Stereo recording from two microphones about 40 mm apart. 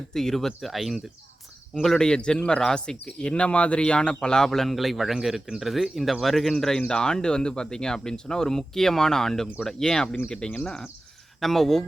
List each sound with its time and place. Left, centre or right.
0.1 s speech: centre
2.0 s speech: left
4.4 s a man's voice: centre
11.3 s speech: centre